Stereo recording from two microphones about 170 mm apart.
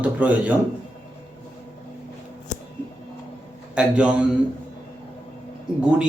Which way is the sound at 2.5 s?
45° left (ahead or behind).